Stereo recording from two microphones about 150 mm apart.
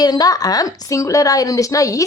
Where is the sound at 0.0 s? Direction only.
25° left (ahead or behind).